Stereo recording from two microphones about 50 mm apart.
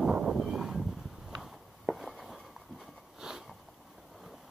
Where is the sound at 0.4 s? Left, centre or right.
Centre.